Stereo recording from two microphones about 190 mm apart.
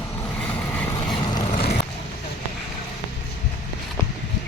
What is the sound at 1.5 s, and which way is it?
Vehicle, 45° left (ahead or behind).